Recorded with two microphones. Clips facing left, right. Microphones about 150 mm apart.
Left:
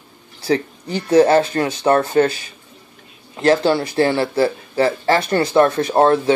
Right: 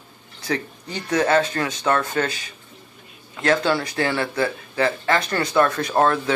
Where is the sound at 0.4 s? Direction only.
30° left (ahead or behind).